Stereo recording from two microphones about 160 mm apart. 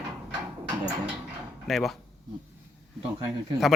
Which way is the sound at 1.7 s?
Centre (ahead or behind).